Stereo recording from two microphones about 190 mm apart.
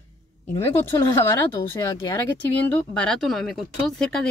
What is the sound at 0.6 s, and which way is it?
Speech, 10° left (ahead or behind).